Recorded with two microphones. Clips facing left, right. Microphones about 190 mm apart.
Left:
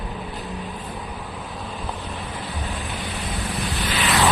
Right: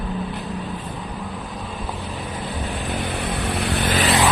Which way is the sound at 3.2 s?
60° right (ahead or behind).